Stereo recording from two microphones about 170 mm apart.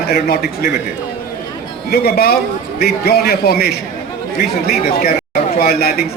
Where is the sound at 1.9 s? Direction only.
70° left (ahead or behind).